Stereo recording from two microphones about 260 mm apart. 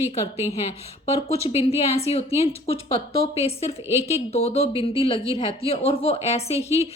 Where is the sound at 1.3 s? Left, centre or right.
Left.